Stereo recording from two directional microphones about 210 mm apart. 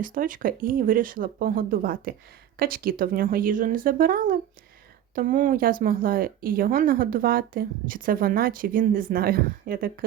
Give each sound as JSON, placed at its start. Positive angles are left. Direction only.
{"t": 0.0, "sound": "speech", "side_deg": -40}